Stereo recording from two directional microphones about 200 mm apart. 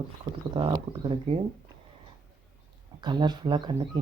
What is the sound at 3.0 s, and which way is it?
Speech, 20° right (ahead or behind).